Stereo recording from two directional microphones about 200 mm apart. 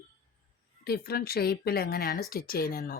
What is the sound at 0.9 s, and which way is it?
Speech, 50° left (ahead or behind).